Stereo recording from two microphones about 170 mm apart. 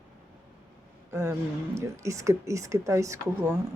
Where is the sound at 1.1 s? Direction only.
15° right (ahead or behind).